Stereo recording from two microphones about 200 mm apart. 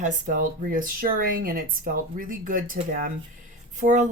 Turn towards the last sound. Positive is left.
turn(degrees=-35)  # may be behind; listen again after turning